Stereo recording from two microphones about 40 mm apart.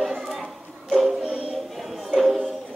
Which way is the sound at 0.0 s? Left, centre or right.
Centre.